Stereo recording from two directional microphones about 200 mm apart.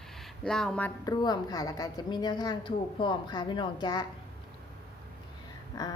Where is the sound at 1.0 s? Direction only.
20° left (ahead or behind).